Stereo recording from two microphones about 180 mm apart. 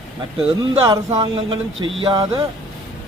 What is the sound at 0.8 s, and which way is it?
Speech, 20° right (ahead or behind).